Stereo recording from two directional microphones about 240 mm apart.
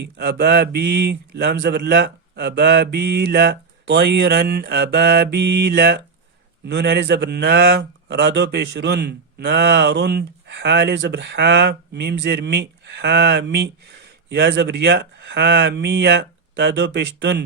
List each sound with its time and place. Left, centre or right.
0.0 s a man's voice: right